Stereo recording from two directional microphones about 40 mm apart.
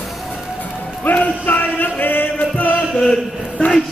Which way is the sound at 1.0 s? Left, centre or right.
Left.